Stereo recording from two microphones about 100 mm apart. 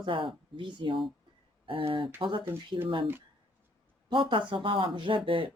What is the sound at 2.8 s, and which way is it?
Speech, 60° right (ahead or behind).